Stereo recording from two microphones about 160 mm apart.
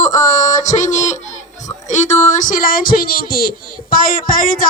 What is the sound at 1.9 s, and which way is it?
Speech, 45° left (ahead or behind).